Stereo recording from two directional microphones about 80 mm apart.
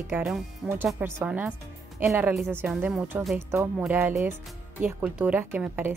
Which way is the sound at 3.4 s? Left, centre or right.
Right.